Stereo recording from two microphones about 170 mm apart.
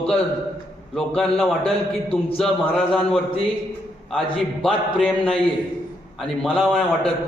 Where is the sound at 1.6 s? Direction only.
35° left (ahead or behind).